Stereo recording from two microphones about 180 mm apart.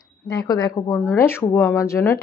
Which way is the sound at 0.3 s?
20° left (ahead or behind).